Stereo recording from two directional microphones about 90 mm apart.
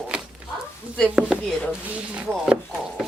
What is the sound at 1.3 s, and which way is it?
Speech, 5° right (ahead or behind).